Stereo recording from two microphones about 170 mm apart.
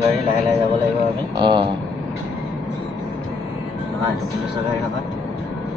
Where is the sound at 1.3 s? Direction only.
30° right (ahead or behind).